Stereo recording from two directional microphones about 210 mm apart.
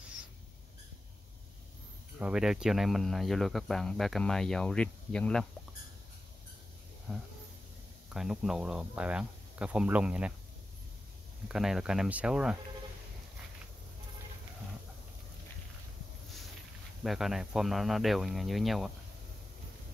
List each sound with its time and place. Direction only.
2.1 s speech: 5° right (ahead or behind)
7.1 s speech: centre (ahead or behind)
11.4 s speech: centre (ahead or behind)
17.0 s speech: centre (ahead or behind)